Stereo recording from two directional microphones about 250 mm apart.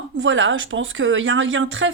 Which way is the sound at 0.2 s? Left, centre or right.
Right.